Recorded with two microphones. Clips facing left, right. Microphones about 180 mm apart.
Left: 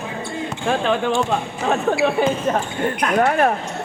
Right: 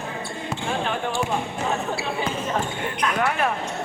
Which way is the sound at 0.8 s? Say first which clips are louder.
Left 7 dB; 90° left.